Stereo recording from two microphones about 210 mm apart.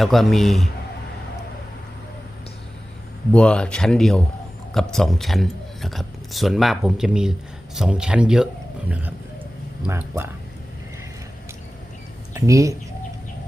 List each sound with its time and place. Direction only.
0.0 s speech: centre (ahead or behind)
3.3 s speech: 5° left (ahead or behind); by 10.2 s 10° right (ahead or behind)
12.3 s speech: 15° right (ahead or behind)